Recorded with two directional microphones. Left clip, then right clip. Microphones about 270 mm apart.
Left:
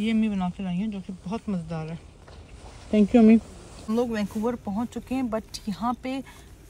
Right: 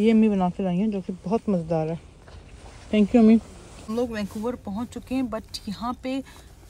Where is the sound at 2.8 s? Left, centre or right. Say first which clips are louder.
Even; centre.